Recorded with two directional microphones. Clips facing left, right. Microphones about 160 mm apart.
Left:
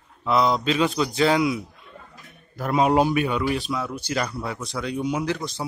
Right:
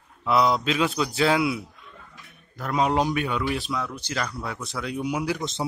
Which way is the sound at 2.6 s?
10° left (ahead or behind).